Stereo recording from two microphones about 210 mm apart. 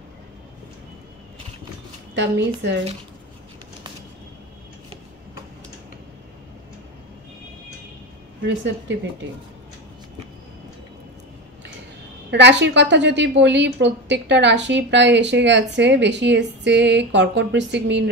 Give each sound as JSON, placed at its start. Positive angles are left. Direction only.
{"t": 2.1, "sound": "a woman's voice", "side_deg": -60}
{"t": 12.3, "sound": "a woman's voice", "side_deg": -55}